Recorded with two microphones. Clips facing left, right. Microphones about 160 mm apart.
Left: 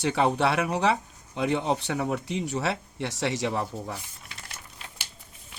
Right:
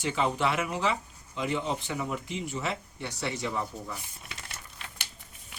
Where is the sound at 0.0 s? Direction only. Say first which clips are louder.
Left 4 dB; 70° left (ahead or behind).